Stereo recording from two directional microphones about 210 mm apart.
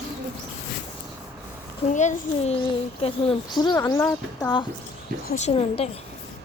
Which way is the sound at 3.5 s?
20° left (ahead or behind).